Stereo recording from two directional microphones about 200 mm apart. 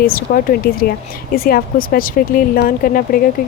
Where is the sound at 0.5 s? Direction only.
50° left (ahead or behind).